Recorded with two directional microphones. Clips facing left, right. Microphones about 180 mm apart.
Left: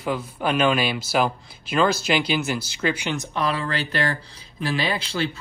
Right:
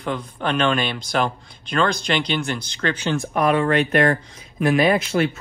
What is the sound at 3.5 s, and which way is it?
Speech, 30° left (ahead or behind).